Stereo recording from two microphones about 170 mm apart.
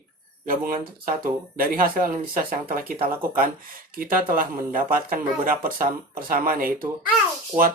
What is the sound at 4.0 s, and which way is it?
Speech, 60° right (ahead or behind).